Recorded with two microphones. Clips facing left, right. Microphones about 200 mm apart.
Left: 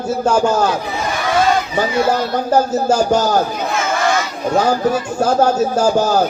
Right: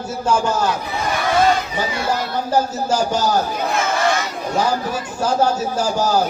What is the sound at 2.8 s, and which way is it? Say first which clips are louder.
Speech: left 5 dB; 50° left (ahead or behind).